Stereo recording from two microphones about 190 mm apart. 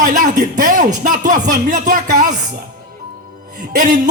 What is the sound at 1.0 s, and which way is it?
Speech, 45° right (ahead or behind).